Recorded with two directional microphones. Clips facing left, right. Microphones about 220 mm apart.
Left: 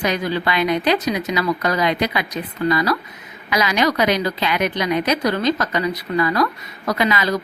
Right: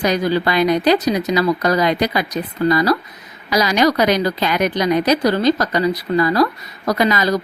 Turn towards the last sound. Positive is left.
turn(degrees=-40)  # may be behind; listen again after turning